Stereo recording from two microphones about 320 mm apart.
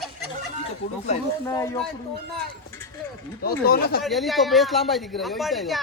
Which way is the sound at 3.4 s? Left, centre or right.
Left.